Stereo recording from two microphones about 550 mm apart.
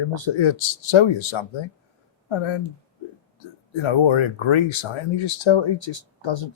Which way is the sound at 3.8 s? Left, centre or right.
Left.